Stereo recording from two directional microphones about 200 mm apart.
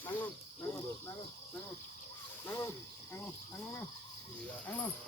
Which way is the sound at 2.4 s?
15° left (ahead or behind).